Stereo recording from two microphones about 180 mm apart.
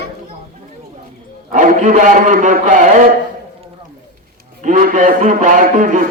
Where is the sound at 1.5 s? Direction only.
45° right (ahead or behind).